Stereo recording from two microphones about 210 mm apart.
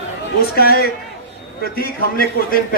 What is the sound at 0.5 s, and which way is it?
A man's voice, 45° left (ahead or behind).